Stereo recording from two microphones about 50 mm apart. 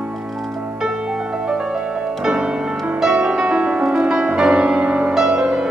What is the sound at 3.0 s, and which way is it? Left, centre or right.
Music, centre.